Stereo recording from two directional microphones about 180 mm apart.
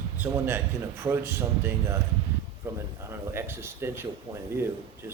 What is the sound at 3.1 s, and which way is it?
A man's voice, 15° right (ahead or behind).